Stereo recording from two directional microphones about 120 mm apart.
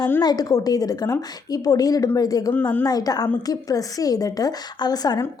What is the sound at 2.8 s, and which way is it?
A woman's voice, 30° left (ahead or behind).